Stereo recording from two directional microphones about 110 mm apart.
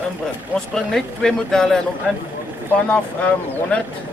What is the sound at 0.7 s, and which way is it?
Speech, 5° left (ahead or behind).